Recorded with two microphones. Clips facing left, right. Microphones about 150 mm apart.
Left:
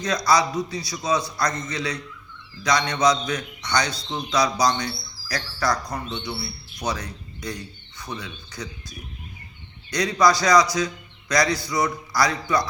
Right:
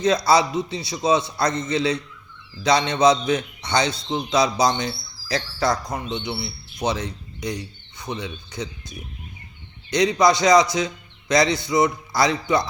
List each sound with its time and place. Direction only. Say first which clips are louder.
0.0 s a man's voice: right 3 dB; 25° right (ahead or behind)